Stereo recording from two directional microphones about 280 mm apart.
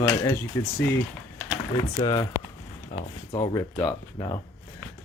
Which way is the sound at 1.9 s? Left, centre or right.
Centre.